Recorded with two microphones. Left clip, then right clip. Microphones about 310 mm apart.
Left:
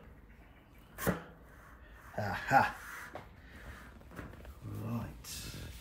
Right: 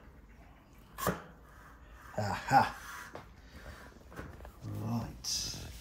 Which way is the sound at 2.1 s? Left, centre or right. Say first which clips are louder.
Right 1 dB; centre.